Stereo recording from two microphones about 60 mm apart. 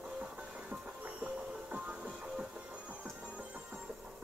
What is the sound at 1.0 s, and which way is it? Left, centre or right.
Music, right.